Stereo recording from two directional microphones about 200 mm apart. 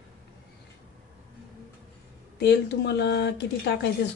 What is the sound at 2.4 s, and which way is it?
Speech, 55° left (ahead or behind).